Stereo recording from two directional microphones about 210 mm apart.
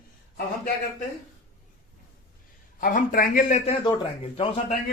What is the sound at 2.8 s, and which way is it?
A man's voice, 40° left (ahead or behind).